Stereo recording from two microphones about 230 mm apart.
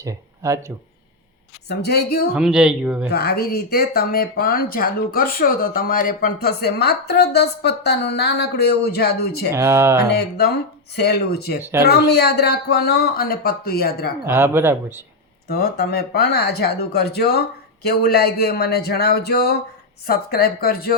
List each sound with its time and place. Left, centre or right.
0.0 s speech: centre
1.6 s speech: left
2.3 s speech: centre
3.1 s speech: left
9.5 s speech: centre
10.0 s speech: left
14.3 s speech: centre
15.4 s speech: left